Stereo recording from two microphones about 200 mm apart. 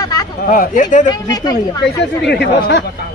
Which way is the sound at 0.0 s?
20° left (ahead or behind).